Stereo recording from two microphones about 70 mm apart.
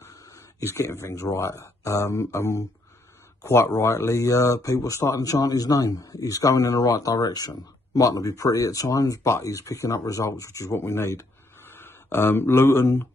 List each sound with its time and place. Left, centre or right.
0.0 s speech: left